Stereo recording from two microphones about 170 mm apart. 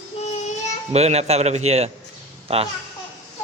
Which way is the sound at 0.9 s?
40° right (ahead or behind).